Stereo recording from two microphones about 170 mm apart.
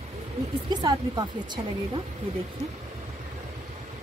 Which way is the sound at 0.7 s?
20° right (ahead or behind).